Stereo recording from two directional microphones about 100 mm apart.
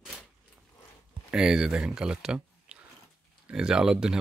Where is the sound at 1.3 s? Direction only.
5° right (ahead or behind).